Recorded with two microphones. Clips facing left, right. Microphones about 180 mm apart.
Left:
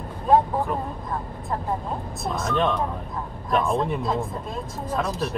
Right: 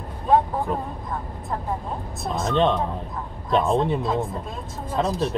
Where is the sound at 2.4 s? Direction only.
25° right (ahead or behind).